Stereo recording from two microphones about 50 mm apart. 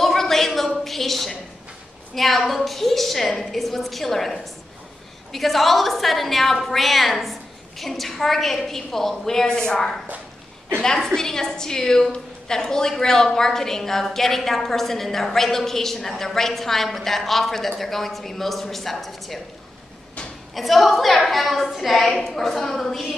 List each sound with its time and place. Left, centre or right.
0.0 s a sound: centre
2.1 s a woman's voice: centre
20.5 s a woman's voice: centre